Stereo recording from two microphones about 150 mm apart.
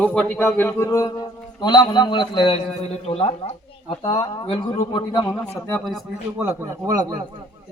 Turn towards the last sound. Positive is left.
turn(degrees=-25)  # may be behind; listen again after turning